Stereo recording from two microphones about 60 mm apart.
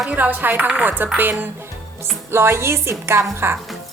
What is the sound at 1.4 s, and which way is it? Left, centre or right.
Music, right.